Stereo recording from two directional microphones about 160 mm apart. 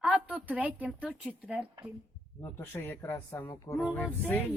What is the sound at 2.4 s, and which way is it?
Speech, 15° left (ahead or behind).